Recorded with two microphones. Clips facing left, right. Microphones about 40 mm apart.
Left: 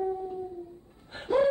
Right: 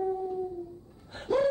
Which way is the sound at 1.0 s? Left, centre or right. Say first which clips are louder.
Left 2 dB; left.